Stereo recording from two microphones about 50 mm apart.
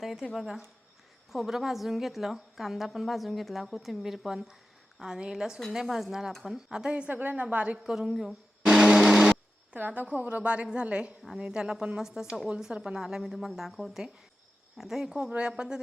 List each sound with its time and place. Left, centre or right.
0.0 s a woman's voice: centre
7.1 s a woman's voice: right
7.5 s a woman's voice: right
7.9 s a woman's voice: centre
8.6 s a sound: centre
9.7 s a woman's voice: right; by 15.8 s centre